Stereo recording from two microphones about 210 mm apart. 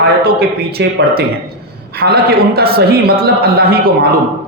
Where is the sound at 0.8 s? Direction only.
55° right (ahead or behind).